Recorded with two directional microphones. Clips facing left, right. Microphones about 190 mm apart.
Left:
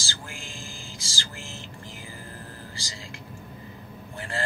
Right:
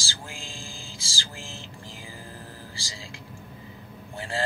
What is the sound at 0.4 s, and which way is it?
Music, 30° right (ahead or behind).